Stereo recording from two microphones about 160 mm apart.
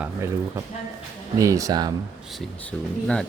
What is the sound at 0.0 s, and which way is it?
Speech, 15° right (ahead or behind).